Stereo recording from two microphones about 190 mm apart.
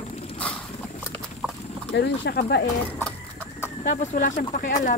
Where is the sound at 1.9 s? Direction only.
65° left (ahead or behind).